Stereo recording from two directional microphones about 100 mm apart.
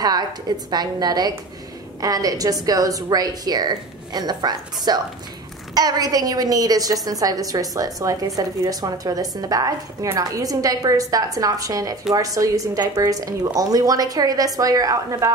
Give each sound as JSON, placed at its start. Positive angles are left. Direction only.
{"t": 0.7, "sound": "a woman's voice", "side_deg": -45}